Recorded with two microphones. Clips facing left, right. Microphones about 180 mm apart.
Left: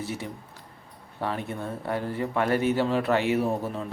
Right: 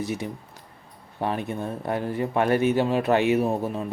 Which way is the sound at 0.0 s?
15° right (ahead or behind).